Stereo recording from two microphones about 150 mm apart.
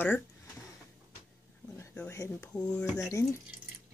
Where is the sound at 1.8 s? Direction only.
15° left (ahead or behind).